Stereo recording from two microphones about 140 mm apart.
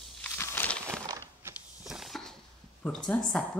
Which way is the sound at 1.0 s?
25° right (ahead or behind).